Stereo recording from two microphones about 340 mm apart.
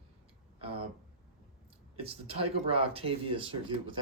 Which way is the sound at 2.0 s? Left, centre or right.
Centre.